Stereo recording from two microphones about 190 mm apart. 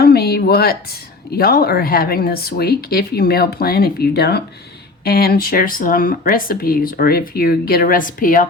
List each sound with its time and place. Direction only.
0.0 s speech: 55° left (ahead or behind)